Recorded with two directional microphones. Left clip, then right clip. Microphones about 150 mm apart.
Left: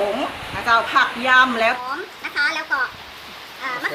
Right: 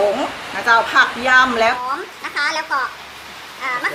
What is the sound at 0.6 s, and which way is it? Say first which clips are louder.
A woman's voice: right 3 dB; 5° left (ahead or behind).